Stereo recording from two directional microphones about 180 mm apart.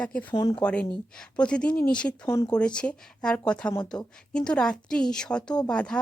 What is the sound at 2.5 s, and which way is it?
A woman's voice, 5° left (ahead or behind).